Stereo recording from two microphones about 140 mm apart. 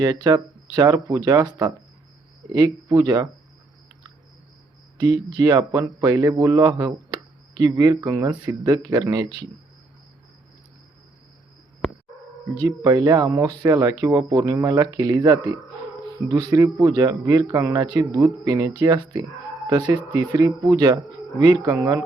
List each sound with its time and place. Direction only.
0.0 s speech: 30° right (ahead or behind)
4.9 s speech: 30° right (ahead or behind)
12.6 s speech: 25° right (ahead or behind)